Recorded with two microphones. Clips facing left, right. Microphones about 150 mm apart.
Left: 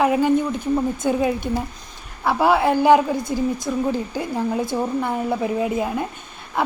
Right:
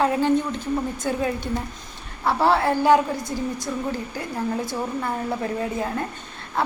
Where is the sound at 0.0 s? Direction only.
15° left (ahead or behind).